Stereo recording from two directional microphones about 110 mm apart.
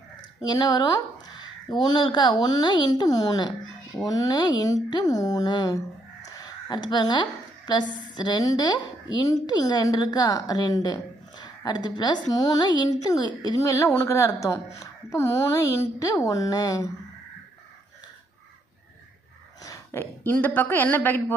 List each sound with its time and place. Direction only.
0.4 s a woman's voice: 40° left (ahead or behind)
13.6 s speech: 25° left (ahead or behind)
19.6 s a woman's voice: 25° left (ahead or behind)